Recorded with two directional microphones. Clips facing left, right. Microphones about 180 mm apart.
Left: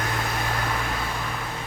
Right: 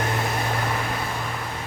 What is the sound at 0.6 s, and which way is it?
Vehicle, 10° right (ahead or behind).